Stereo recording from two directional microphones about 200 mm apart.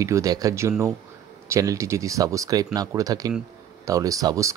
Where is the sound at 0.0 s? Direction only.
15° right (ahead or behind).